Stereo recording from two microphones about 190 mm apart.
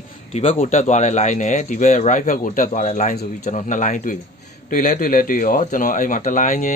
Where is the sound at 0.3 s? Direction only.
35° left (ahead or behind).